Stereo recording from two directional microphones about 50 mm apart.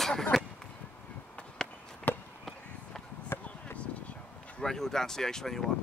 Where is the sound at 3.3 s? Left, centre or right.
Left.